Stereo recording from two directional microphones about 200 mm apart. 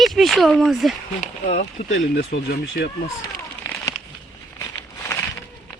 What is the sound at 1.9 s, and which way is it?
Speech, 65° left (ahead or behind).